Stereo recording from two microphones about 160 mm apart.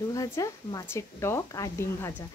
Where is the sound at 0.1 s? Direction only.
20° left (ahead or behind).